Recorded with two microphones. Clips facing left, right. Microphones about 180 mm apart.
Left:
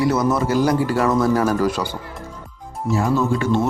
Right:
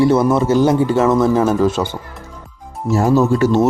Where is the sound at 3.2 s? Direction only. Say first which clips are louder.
Right 5 dB; 40° right (ahead or behind).